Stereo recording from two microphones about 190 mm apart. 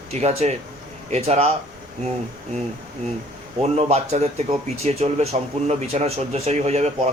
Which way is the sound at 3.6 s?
35° right (ahead or behind).